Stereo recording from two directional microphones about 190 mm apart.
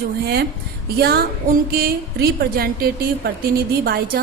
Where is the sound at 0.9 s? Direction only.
55° right (ahead or behind).